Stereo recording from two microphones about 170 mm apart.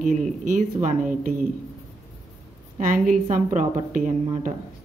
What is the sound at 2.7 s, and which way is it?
Speech, 50° right (ahead or behind).